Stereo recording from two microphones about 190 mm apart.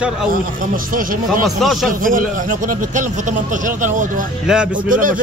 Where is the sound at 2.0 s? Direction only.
45° right (ahead or behind).